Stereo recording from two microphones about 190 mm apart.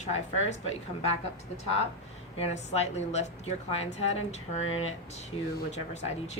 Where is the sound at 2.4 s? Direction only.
35° left (ahead or behind).